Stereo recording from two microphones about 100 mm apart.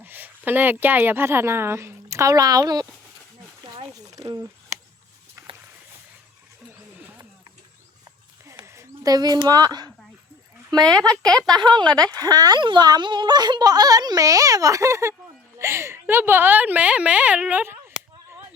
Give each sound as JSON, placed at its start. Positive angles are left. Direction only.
{"t": 0.0, "sound": "a woman's voice", "side_deg": -20}
{"t": 3.6, "sound": "a sound", "side_deg": -45}
{"t": 8.6, "sound": "a sound", "side_deg": -30}
{"t": 9.1, "sound": "a woman's voice", "side_deg": -40}
{"t": 11.1, "sound": "speech", "side_deg": 5}
{"t": 11.6, "sound": "speech", "side_deg": -50}